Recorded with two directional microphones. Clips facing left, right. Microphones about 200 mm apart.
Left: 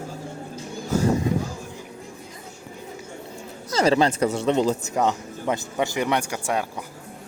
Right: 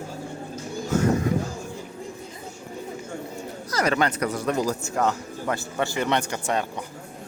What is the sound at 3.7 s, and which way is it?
Speech, 30° left (ahead or behind).